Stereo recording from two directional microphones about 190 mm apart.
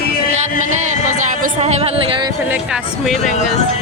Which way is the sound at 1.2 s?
40° right (ahead or behind).